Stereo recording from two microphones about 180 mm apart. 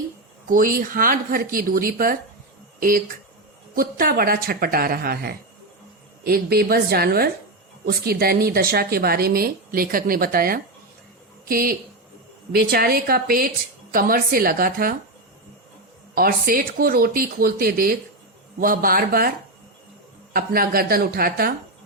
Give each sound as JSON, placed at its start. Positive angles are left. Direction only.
{"t": 0.4, "sound": "speech", "side_deg": -50}
{"t": 3.8, "sound": "a woman's voice", "side_deg": -55}
{"t": 16.1, "sound": "a woman's voice", "side_deg": -55}
{"t": 20.3, "sound": "a woman's voice", "side_deg": -55}